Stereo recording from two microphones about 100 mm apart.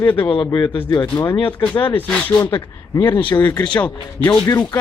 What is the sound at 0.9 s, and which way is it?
Speech, 40° left (ahead or behind).